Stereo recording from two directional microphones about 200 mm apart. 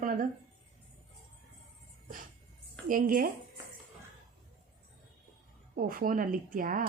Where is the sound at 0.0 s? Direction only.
45° right (ahead or behind).